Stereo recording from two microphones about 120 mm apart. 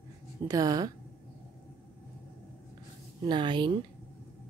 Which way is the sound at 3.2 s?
40° right (ahead or behind).